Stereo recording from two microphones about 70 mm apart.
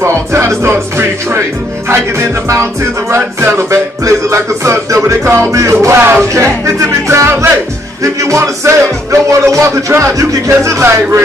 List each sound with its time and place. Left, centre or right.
0.0 s music: right